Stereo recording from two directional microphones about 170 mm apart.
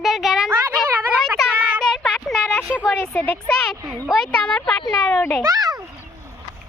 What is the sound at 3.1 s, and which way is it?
Child singing, 5° left (ahead or behind).